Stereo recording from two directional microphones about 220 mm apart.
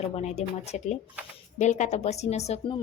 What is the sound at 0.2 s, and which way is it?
A woman's voice, 30° left (ahead or behind).